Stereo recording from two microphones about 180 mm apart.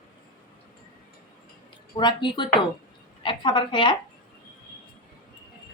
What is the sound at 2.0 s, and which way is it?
A woman's voice, 25° left (ahead or behind).